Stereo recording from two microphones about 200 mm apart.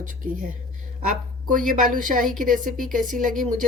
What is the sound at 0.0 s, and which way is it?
A woman's voice, 40° right (ahead or behind).